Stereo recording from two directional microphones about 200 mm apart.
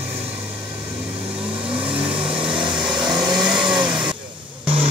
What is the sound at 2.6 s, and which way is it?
Vehicle, centre (ahead or behind).